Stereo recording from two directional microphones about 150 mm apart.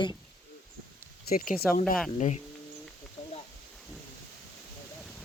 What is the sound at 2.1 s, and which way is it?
Speech, 50° left (ahead or behind).